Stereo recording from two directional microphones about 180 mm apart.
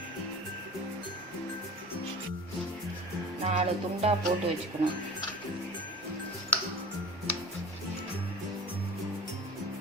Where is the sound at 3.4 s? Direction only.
35° right (ahead or behind).